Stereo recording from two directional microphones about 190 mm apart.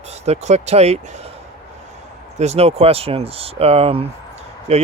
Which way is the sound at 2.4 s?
35° right (ahead or behind).